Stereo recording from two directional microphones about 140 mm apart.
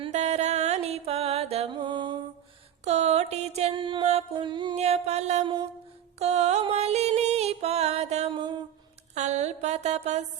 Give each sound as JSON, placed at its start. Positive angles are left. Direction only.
{"t": 0.1, "sound": "music", "side_deg": -55}
{"t": 1.7, "sound": "music", "side_deg": -35}
{"t": 2.8, "sound": "music", "side_deg": -50}
{"t": 4.8, "sound": "music", "side_deg": -50}
{"t": 8.3, "sound": "a sound", "side_deg": -35}
{"t": 9.1, "sound": "mantra", "side_deg": -55}